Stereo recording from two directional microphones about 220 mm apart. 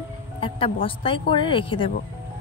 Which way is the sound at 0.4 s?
25° left (ahead or behind).